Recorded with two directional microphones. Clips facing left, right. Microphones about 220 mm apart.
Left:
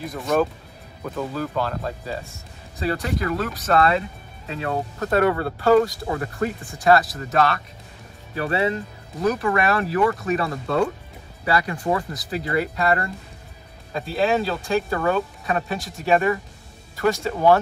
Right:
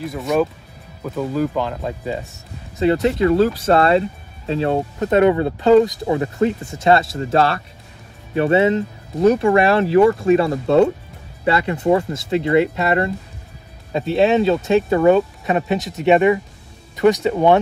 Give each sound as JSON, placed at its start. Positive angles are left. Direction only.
{"t": 0.0, "sound": "speech", "side_deg": 0}
{"t": 1.0, "sound": "speech", "side_deg": -15}